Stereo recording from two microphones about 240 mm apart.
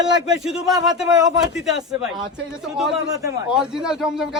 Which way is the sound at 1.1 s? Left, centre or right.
Centre.